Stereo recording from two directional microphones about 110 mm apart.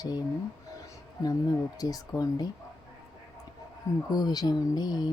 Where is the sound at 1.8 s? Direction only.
35° left (ahead or behind).